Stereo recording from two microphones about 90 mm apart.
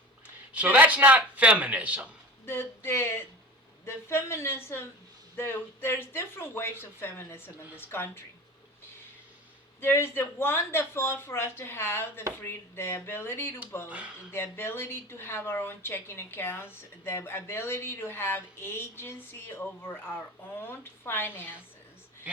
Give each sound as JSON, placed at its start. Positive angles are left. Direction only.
{"t": 0.5, "sound": "speech", "side_deg": -15}
{"t": 2.5, "sound": "speech", "side_deg": 25}
{"t": 9.8, "sound": "speech", "side_deg": 25}
{"t": 13.8, "sound": "speech", "side_deg": -15}
{"t": 14.3, "sound": "speech", "side_deg": 25}